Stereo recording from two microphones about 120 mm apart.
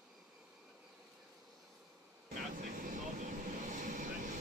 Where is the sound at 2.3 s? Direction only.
90° right.